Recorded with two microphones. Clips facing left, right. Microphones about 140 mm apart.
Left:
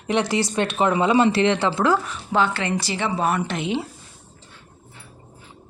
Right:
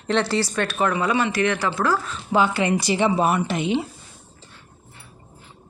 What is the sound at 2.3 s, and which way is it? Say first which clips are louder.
Speech: right 2 dB; 10° right (ahead or behind).